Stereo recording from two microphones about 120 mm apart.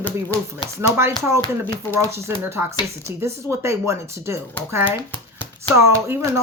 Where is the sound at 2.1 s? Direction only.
20° right (ahead or behind).